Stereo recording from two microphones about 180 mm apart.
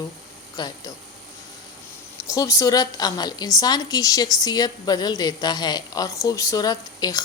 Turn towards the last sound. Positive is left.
turn(degrees=20)  # may be behind; listen again after turning